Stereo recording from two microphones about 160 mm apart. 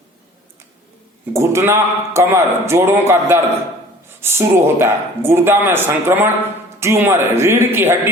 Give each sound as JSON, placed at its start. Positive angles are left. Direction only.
{"t": 1.3, "sound": "speech", "side_deg": -15}